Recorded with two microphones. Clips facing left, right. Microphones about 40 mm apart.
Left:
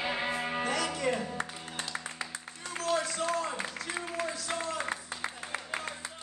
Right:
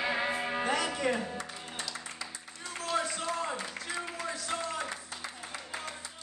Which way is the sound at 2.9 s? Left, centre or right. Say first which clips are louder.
Left 2 dB; centre.